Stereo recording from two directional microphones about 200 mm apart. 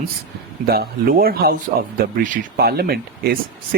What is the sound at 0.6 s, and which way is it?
Speech, 50° right (ahead or behind).